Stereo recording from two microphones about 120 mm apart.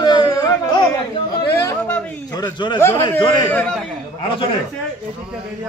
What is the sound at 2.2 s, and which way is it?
Speech, 35° left (ahead or behind).